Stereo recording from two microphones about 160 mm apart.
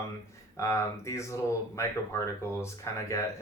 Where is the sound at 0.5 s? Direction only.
20° left (ahead or behind).